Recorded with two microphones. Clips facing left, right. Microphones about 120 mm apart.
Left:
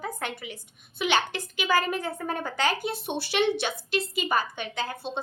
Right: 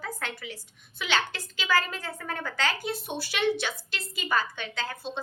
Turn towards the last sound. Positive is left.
turn(degrees=15)  # may be behind; listen again after turning